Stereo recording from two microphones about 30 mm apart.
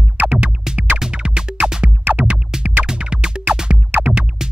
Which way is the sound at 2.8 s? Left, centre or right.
Right.